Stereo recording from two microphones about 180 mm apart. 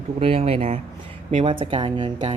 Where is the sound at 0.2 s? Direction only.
30° right (ahead or behind).